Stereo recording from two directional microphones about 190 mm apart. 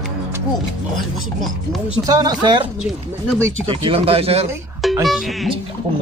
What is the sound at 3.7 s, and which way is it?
Speech, 30° right (ahead or behind).